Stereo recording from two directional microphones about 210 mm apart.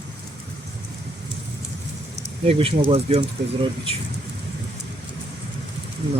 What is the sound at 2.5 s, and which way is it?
Speech, 25° right (ahead or behind).